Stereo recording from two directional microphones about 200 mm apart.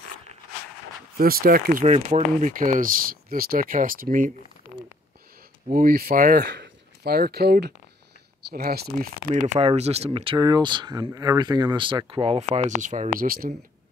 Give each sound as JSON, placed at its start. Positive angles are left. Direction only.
{"t": 1.1, "sound": "speech", "side_deg": -45}
{"t": 5.7, "sound": "speech", "side_deg": -45}
{"t": 9.6, "sound": "speech", "side_deg": -30}